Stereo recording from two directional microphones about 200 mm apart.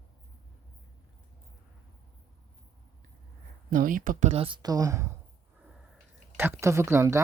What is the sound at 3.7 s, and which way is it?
Speech, 45° right (ahead or behind).